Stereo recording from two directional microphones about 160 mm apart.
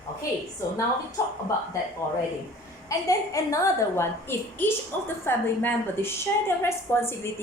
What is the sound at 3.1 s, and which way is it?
A child's voice, 20° left (ahead or behind).